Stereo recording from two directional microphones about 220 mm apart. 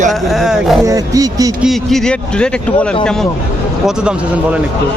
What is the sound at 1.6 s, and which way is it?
Speech, centre (ahead or behind).